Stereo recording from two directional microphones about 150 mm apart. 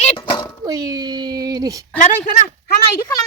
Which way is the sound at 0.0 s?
40° left (ahead or behind).